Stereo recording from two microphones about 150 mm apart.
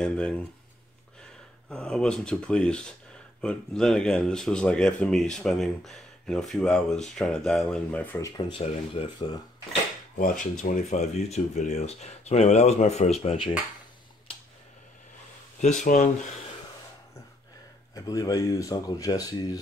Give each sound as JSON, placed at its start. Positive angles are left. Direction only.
{"t": 1.7, "sound": "speech", "side_deg": 5}
{"t": 8.5, "sound": "speech", "side_deg": 35}
{"t": 10.1, "sound": "speech", "side_deg": 65}
{"t": 15.6, "sound": "speech", "side_deg": 50}
{"t": 17.9, "sound": "speech", "side_deg": 25}